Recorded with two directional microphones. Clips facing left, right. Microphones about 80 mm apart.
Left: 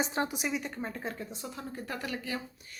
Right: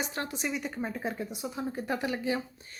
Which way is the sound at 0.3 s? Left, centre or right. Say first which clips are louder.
Right 1 dB; centre.